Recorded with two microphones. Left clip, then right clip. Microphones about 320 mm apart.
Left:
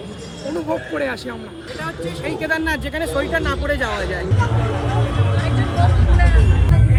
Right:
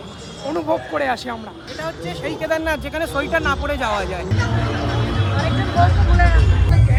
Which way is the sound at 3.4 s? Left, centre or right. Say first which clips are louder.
Right 1 dB; centre.